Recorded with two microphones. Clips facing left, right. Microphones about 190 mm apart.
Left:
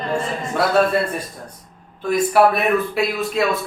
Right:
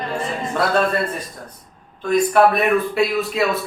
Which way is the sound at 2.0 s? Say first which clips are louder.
Right 1 dB; 5° left (ahead or behind).